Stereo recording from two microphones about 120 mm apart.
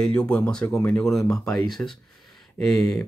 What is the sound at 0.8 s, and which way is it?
Speech, 20° left (ahead or behind).